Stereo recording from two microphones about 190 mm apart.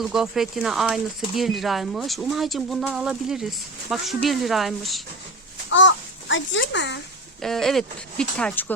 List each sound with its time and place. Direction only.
0.0 s speech: centre (ahead or behind)
5.7 s a child's voice: 80° left
7.4 s speech: centre (ahead or behind)